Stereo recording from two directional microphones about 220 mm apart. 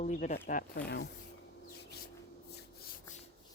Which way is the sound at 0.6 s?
45° left (ahead or behind).